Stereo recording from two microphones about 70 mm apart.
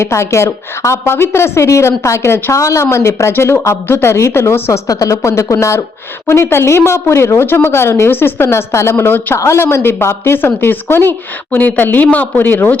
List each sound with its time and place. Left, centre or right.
0.0 s a woman's voice: left
4.9 s speech: left
5.1 s a woman's voice: left